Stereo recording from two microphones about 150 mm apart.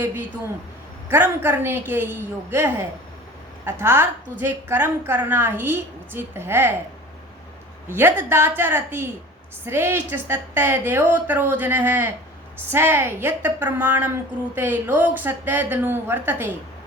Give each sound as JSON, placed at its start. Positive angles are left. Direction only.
{"t": 1.1, "sound": "a woman's voice", "side_deg": -15}
{"t": 7.9, "sound": "a woman's voice", "side_deg": -15}